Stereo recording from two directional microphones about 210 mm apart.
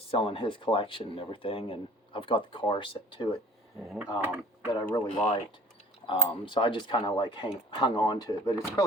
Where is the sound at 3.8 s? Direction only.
Centre (ahead or behind).